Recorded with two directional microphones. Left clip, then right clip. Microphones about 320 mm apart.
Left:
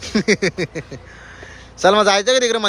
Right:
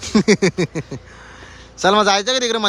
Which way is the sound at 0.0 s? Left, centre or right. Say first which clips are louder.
Right 2 dB; centre.